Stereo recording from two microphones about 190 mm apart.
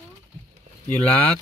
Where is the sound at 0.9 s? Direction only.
10° left (ahead or behind).